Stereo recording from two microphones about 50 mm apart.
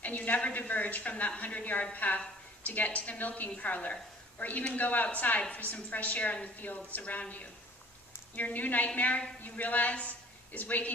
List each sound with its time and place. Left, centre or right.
0.0 s a woman's voice: left